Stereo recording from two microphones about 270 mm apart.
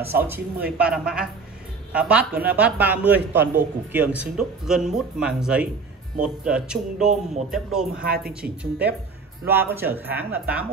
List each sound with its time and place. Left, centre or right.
0.1 s speech: centre
8.0 s a woman's voice: right
8.3 s speech: centre